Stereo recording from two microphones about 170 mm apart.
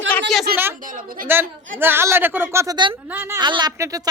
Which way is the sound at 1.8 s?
15° right (ahead or behind).